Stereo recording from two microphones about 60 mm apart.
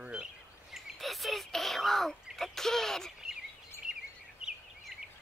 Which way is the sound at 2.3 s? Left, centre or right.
Centre.